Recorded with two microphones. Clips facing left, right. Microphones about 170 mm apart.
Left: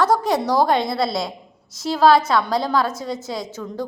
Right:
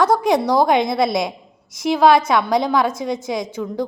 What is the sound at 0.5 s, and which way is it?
A woman's voice, 15° right (ahead or behind).